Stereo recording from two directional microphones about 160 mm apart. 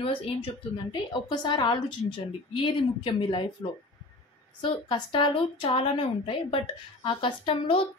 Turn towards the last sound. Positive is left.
turn(degrees=35)  # may be behind; listen again after turning